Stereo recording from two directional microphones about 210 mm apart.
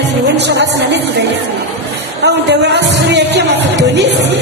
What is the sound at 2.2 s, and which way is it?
Speech, 55° right (ahead or behind).